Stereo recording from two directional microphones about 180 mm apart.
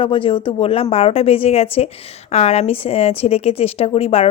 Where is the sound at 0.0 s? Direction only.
30° left (ahead or behind).